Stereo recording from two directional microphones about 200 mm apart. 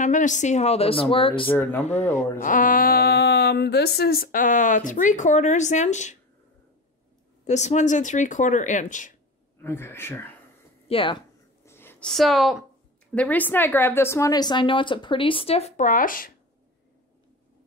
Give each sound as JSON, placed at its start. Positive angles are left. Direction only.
{"t": 0.0, "sound": "speech", "side_deg": 40}
{"t": 1.5, "sound": "speech", "side_deg": 10}
{"t": 2.4, "sound": "speech", "side_deg": 40}
{"t": 7.4, "sound": "speech", "side_deg": 35}
{"t": 9.6, "sound": "speech", "side_deg": 10}
{"t": 10.9, "sound": "a woman's voice", "side_deg": 25}
{"t": 11.6, "sound": "a sound", "side_deg": 10}
{"t": 13.1, "sound": "a woman's voice", "side_deg": 5}